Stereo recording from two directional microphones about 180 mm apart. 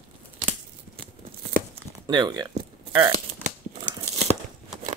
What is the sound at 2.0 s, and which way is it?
Speech, 25° right (ahead or behind).